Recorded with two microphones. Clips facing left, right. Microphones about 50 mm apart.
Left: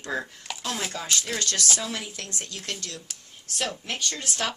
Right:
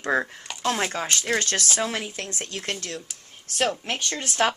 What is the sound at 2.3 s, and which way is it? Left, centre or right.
Speech, right.